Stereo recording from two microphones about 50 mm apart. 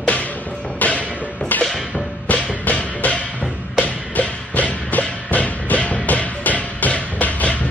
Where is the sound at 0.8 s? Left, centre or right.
Left.